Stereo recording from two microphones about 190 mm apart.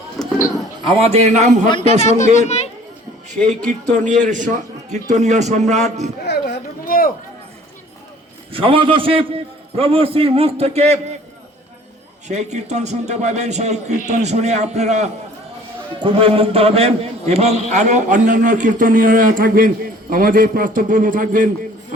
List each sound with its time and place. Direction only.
0.2 s a sound: centre (ahead or behind)
0.8 s a man's voice: 30° right (ahead or behind)
1.7 s speech: 30° left (ahead or behind)
3.7 s a man's voice: 40° right (ahead or behind)
6.2 s a sound: 55° left (ahead or behind)
8.5 s a man's voice: 30° right (ahead or behind)
12.3 s a man's voice: 35° right (ahead or behind)